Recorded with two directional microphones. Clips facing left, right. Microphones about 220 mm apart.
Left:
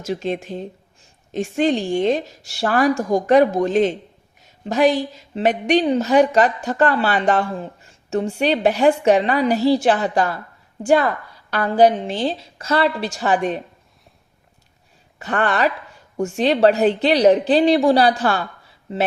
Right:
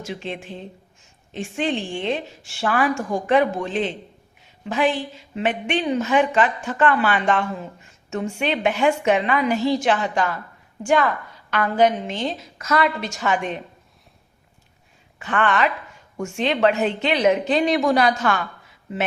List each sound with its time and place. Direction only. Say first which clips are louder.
0.0 s speech: left 7 dB; 40° left (ahead or behind)
15.2 s speech: left 1 dB; 35° left (ahead or behind)